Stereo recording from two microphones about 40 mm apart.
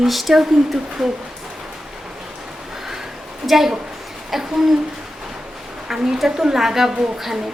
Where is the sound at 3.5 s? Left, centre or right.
Centre.